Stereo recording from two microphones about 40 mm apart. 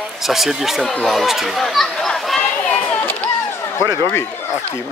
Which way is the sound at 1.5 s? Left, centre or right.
Centre.